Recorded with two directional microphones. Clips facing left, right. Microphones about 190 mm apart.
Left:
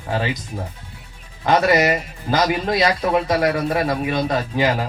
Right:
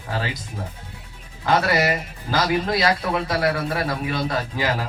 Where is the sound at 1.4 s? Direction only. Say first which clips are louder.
Left 4 dB; 20° left (ahead or behind).